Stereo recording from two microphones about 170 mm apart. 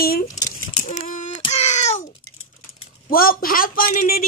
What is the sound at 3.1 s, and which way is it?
A man's voice, 60° left (ahead or behind).